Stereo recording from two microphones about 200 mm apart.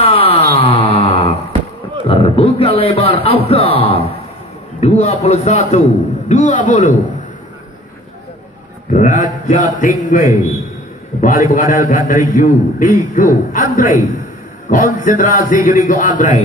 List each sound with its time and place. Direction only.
0.0 s a sound: 30° left (ahead or behind)
4.7 s a man's voice: 30° left (ahead or behind)
8.9 s a man's voice: 40° left (ahead or behind)
15.0 s a man's voice: 40° left (ahead or behind)